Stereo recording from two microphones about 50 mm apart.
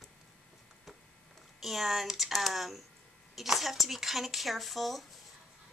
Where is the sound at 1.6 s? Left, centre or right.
Centre.